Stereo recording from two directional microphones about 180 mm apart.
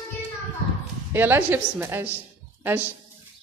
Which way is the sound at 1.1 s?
10° right (ahead or behind).